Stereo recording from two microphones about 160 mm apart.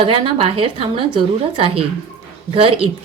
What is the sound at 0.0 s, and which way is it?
A woman's voice, 35° right (ahead or behind).